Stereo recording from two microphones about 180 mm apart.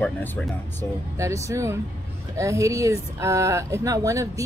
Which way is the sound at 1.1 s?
15° right (ahead or behind).